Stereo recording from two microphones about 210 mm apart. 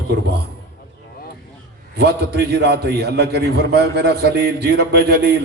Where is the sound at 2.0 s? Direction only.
50° right (ahead or behind).